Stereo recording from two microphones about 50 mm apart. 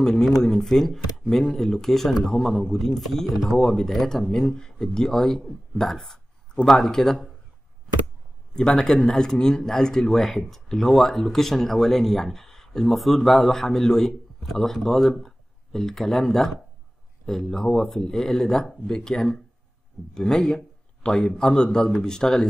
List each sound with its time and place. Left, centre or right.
0.0 s speech: centre
8.5 s speech: centre